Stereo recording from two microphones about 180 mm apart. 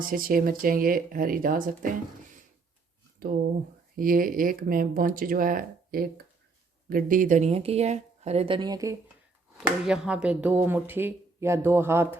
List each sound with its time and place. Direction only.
0.0 s speech: 50° right (ahead or behind)
3.2 s speech: 55° right (ahead or behind); by 9.0 s 20° right (ahead or behind)
9.8 s speech: 5° right (ahead or behind)